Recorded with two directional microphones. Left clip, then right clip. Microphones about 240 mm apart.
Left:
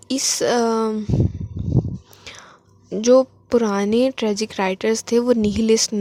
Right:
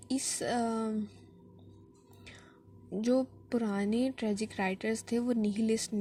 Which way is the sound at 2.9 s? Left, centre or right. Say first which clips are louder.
Left 16 dB; left.